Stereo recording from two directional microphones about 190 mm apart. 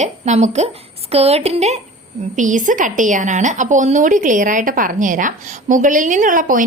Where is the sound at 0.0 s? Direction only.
35° right (ahead or behind).